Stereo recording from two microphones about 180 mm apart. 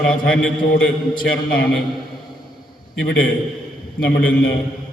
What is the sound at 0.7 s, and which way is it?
Speech, 55° left (ahead or behind).